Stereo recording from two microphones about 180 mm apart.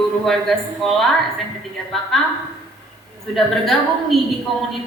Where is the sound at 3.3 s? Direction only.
Centre (ahead or behind).